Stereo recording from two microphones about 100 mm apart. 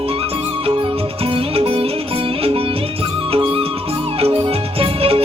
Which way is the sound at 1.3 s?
75° right (ahead or behind).